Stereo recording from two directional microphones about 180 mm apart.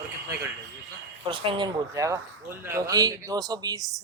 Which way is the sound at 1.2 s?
25° right (ahead or behind).